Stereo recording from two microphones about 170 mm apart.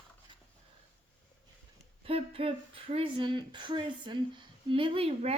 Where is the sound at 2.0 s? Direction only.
35° right (ahead or behind).